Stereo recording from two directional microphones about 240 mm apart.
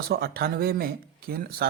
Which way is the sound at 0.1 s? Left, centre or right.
Right.